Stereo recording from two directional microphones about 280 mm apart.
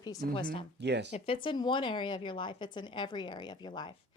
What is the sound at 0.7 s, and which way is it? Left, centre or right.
Speech, right.